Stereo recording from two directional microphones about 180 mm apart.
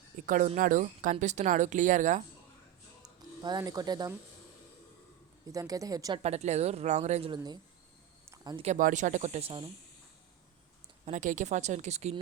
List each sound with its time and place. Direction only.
0.3 s speech: 45° right (ahead or behind)
3.4 s speech: 20° right (ahead or behind)
5.5 s speech: 20° right (ahead or behind)
6.2 s speech: 40° right (ahead or behind)
7.3 s speech: 20° right (ahead or behind)
8.3 s a sound: 20° right (ahead or behind)
8.6 s speech: 40° right (ahead or behind)
11.0 s speech: 45° right (ahead or behind)